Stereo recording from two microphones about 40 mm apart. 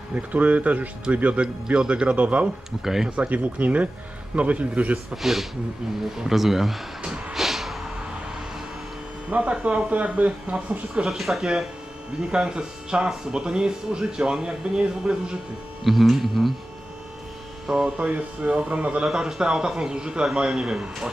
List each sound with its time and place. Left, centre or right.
0.1 s speech: right
1.4 s speech: right
2.8 s speech: centre
3.2 s speech: right
5.1 s speech: centre
7.3 s vehicle: centre
9.3 s speech: right
10.9 s speech: centre
12.2 s speech: right
15.8 s speech: centre
17.7 s speech: centre
17.9 s speech: right
19.0 s speech: centre